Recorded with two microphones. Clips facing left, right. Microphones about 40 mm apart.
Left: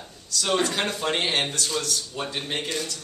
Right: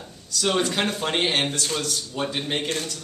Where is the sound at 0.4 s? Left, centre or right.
Centre.